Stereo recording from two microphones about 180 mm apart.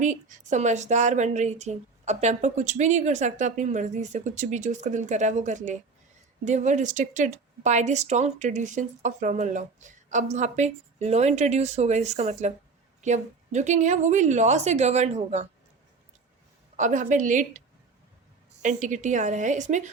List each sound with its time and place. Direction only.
0.0 s speech: 45° right (ahead or behind)
16.7 s a woman's voice: 45° right (ahead or behind)
18.6 s a woman's voice: 45° right (ahead or behind)